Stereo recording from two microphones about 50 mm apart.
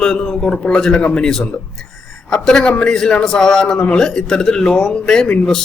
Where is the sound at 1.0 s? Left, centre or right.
Left.